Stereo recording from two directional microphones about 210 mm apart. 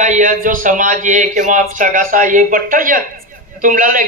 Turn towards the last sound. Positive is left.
turn(degrees=-40)  # may be behind; listen again after turning